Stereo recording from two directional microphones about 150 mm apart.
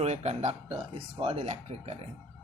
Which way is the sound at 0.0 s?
45° right (ahead or behind).